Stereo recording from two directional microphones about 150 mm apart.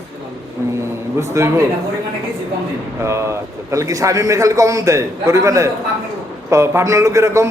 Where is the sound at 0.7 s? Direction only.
20° right (ahead or behind).